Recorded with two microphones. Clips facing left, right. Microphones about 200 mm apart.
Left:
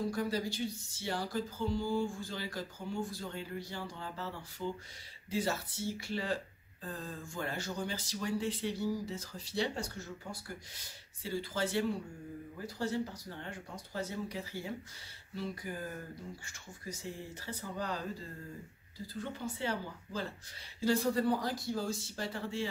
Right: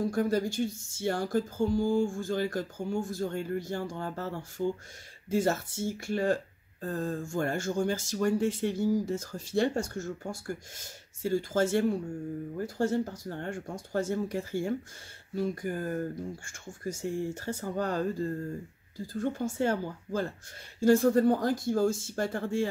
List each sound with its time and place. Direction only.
0.1 s speech: 50° right (ahead or behind)